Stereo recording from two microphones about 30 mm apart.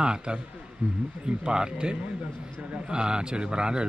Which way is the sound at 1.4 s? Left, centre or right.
Right.